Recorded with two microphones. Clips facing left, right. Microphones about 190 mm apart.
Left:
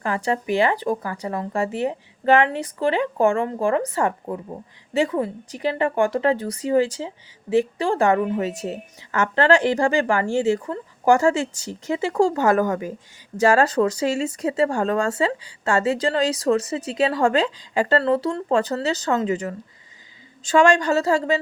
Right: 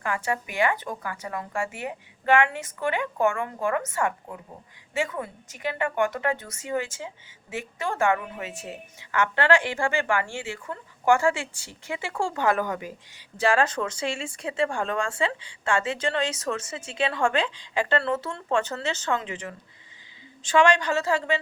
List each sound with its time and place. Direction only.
0.0 s speech: 35° left (ahead or behind)